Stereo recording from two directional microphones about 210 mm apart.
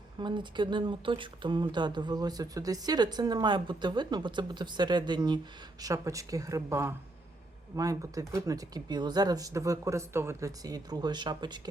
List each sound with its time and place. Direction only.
0.2 s speech: 20° right (ahead or behind)